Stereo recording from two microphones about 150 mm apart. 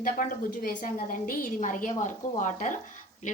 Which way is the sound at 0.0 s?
70° left (ahead or behind).